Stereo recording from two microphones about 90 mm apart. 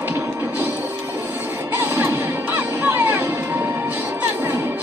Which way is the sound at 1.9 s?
20° right (ahead or behind).